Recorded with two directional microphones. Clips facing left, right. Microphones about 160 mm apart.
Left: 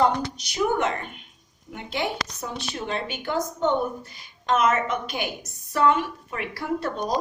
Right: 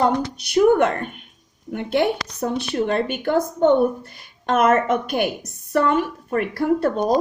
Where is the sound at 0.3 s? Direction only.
60° right (ahead or behind).